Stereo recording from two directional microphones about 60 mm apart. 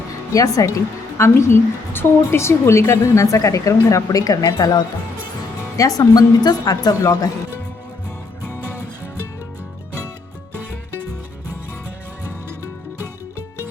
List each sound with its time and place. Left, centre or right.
0.3 s speech: left
1.2 s a woman's voice: left
3.0 s speech: left